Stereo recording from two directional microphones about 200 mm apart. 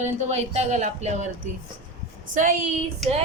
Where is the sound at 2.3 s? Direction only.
40° right (ahead or behind).